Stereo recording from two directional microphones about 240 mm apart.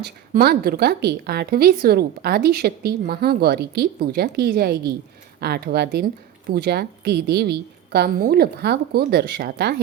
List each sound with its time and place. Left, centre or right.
0.0 s speech: right